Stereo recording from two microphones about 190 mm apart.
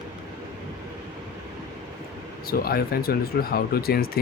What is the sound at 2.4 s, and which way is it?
Speech, 55° left (ahead or behind).